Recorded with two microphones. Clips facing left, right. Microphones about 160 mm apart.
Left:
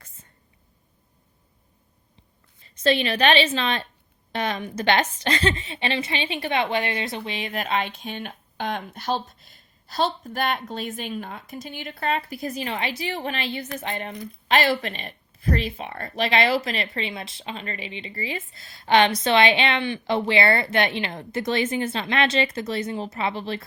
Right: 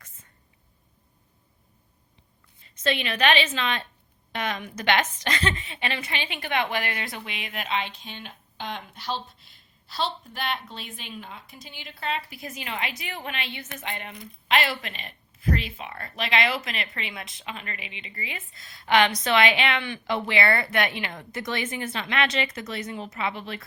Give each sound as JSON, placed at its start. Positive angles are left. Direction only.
{"t": 2.8, "sound": "a woman's voice", "side_deg": 35}